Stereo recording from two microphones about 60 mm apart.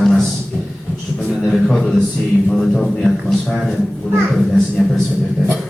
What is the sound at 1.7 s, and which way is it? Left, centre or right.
A man's voice, centre.